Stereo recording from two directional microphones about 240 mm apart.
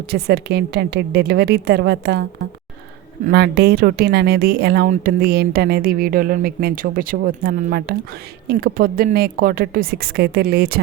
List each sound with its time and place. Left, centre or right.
0.1 s a woman's voice: right
3.2 s speech: right